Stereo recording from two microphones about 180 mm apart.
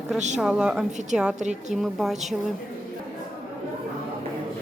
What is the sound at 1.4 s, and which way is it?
Speech, 40° right (ahead or behind).